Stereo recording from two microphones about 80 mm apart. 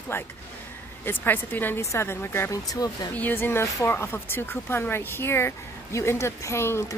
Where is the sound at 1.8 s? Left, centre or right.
Left.